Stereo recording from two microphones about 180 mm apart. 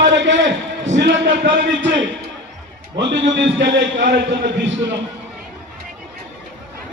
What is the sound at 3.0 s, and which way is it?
A man's voice, 85° right.